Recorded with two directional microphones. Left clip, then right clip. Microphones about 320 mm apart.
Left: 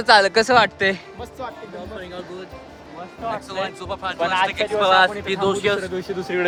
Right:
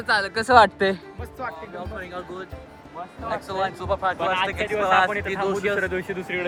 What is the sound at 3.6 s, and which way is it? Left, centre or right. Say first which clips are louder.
Speech: right 3 dB; right.